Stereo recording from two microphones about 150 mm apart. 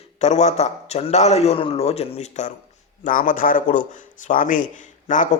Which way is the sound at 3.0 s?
60° left (ahead or behind).